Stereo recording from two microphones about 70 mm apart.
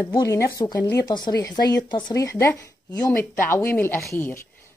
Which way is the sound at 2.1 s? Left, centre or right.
Left.